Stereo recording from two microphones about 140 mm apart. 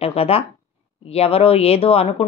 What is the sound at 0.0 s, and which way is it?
A woman's voice, 45° left (ahead or behind).